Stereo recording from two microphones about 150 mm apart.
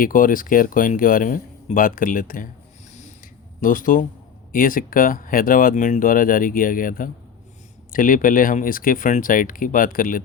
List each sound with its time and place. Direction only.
0.0 s speech: 65° left (ahead or behind)
3.6 s speech: 65° left (ahead or behind)